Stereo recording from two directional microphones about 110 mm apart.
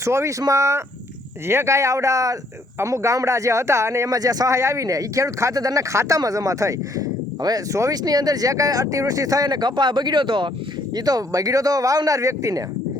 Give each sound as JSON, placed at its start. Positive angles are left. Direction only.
{"t": 0.0, "sound": "speech", "side_deg": -25}
{"t": 10.9, "sound": "speech", "side_deg": -35}